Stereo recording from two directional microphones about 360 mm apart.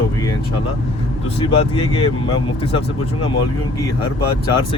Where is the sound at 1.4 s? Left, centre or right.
Centre.